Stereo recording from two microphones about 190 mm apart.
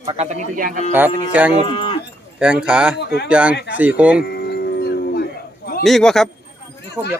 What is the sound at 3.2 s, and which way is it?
Speech, 5° right (ahead or behind).